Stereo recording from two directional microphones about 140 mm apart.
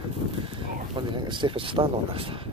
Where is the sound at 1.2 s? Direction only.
35° right (ahead or behind).